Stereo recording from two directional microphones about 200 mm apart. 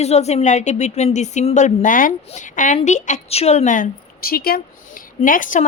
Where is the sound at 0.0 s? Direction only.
35° left (ahead or behind).